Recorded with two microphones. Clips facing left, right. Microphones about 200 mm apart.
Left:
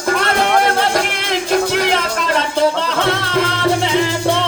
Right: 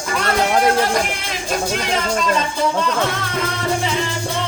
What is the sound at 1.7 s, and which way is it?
Music, 65° left (ahead or behind).